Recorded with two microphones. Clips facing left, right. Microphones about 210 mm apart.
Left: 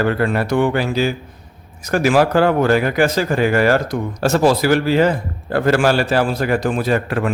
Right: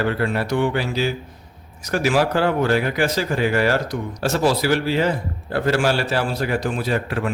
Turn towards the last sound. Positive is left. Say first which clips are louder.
# left 4 dB
turn(degrees=50)  # may be behind; listen again after turning